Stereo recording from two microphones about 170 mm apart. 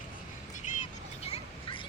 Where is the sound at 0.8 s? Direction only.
35° left (ahead or behind).